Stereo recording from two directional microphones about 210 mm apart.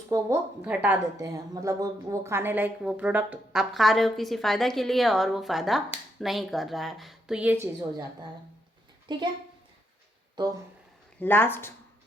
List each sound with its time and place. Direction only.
0.1 s a woman's voice: 10° right (ahead or behind)
10.3 s speech: 15° right (ahead or behind)
11.2 s speech: 10° left (ahead or behind)